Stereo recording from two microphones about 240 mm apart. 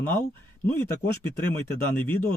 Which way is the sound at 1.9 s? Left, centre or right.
Centre.